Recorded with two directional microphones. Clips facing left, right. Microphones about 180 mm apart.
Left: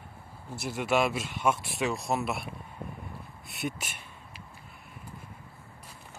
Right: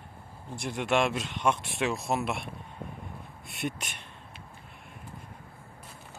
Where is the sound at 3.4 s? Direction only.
Centre (ahead or behind).